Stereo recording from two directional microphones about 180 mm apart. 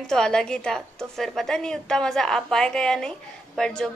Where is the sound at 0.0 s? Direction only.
5° left (ahead or behind).